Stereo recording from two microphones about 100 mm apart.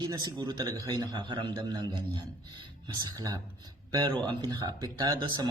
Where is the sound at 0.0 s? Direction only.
45° right (ahead or behind).